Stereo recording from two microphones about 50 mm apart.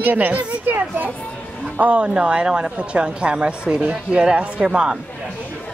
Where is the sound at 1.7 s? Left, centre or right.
Right.